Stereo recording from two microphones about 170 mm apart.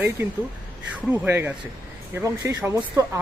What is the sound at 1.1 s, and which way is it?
Speech, 10° right (ahead or behind).